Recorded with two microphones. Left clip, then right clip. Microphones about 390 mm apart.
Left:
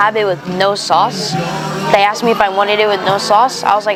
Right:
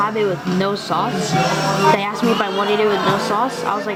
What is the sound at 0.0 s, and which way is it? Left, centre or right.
Speech, left.